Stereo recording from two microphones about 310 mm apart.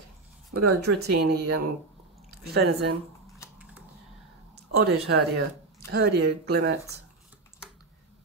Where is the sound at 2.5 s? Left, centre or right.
Right.